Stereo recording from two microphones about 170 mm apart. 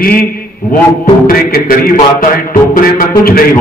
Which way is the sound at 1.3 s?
60° left (ahead or behind).